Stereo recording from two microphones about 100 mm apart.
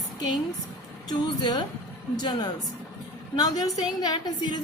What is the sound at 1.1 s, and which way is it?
Speech, 45° left (ahead or behind).